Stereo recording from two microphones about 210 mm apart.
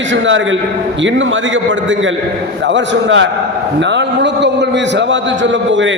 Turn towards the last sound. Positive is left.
turn(degrees=-55)  # may be behind; listen again after turning